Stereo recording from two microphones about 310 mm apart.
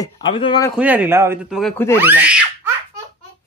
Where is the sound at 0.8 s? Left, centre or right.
Centre.